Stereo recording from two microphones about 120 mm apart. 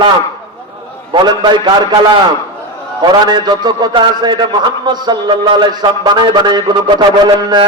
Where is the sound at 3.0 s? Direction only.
35° right (ahead or behind).